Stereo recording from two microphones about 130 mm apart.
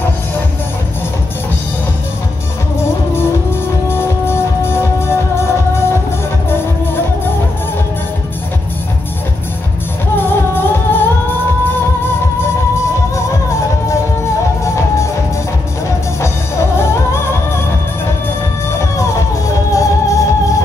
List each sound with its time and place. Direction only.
3.9 s music: 20° left (ahead or behind)
10.1 s music: 15° left (ahead or behind)
16.7 s music: 20° left (ahead or behind)
18.7 s music: 25° left (ahead or behind)